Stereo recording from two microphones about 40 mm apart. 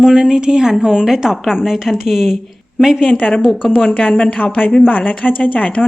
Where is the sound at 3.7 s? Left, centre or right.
Left.